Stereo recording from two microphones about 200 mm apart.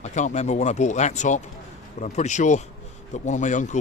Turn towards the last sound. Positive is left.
turn(degrees=40)  # may be behind; listen again after turning